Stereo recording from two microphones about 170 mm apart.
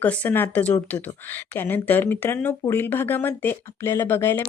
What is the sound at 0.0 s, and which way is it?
Speech, 10° left (ahead or behind).